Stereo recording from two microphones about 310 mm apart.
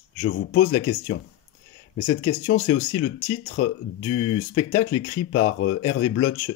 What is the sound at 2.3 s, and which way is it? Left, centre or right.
Speech, left.